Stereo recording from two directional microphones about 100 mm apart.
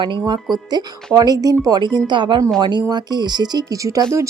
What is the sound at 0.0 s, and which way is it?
Speech, 45° right (ahead or behind).